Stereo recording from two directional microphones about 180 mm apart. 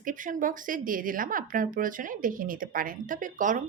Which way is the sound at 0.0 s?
45° right (ahead or behind).